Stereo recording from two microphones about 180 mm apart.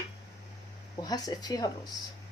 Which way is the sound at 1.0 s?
20° left (ahead or behind).